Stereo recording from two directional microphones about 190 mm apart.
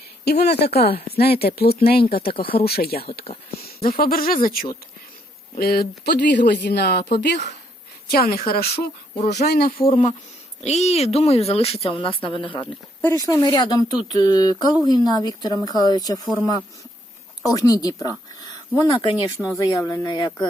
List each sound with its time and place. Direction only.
0.3 s speech: 55° left (ahead or behind)
2.3 s speech: 30° left (ahead or behind)
2.6 s speech: 55° left (ahead or behind)
8.7 s speech: 40° left (ahead or behind)
9.3 s speech: 60° left (ahead or behind)
9.7 s speech: 30° left (ahead or behind)
17.5 s speech: 20° left (ahead or behind)
19.1 s speech: 5° right (ahead or behind)
19.5 s speech: 20° left (ahead or behind)